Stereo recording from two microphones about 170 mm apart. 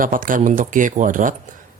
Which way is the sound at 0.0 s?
55° right (ahead or behind).